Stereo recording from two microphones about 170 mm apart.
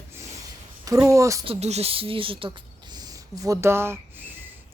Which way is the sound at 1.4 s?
35° right (ahead or behind).